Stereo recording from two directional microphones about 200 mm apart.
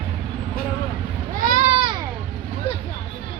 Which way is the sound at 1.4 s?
35° right (ahead or behind).